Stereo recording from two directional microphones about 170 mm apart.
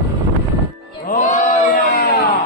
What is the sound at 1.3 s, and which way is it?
Baby cry, 50° left (ahead or behind).